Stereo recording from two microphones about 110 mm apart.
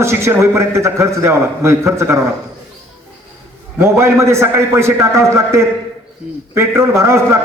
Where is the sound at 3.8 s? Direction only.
25° right (ahead or behind).